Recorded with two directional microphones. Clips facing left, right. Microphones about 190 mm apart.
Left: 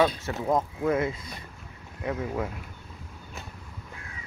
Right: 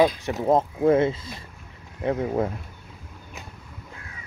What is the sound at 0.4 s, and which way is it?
Speech, 25° right (ahead or behind).